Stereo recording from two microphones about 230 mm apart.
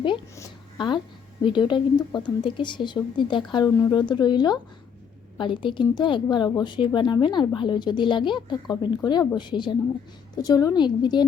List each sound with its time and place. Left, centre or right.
0.0 s a woman's voice: left